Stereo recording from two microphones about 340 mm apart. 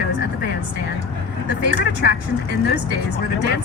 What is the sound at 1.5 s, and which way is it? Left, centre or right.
Speech, left.